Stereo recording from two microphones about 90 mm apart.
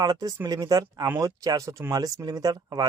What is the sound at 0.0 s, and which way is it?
Speech, 45° right (ahead or behind).